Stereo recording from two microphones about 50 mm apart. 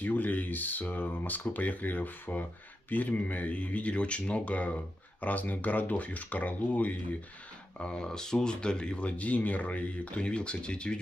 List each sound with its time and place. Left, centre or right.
0.0 s speech: left
7.8 s speech: centre